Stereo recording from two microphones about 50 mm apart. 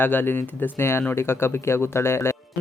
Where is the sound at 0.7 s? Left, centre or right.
Left.